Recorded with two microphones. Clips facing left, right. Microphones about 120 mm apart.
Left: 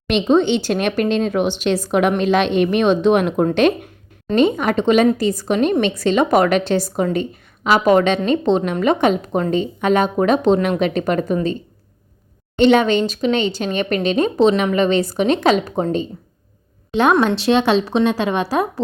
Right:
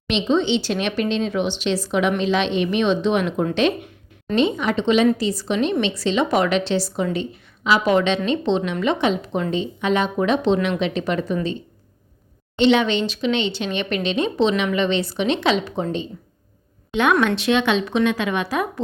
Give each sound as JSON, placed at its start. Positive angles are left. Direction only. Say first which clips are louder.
{"t": 0.1, "sound": "speech", "louder": "left 4 dB", "side_deg": 50}
{"t": 12.5, "sound": "a woman's voice", "louder": "left 4 dB", "side_deg": 45}